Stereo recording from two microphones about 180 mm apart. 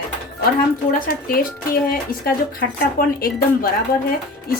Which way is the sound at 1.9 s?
55° left (ahead or behind).